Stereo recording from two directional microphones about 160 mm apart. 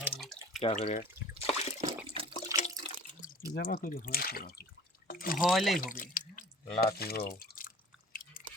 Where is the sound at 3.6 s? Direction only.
60° left (ahead or behind).